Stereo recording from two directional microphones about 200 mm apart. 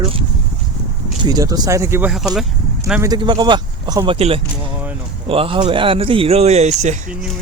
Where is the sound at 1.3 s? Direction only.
20° right (ahead or behind).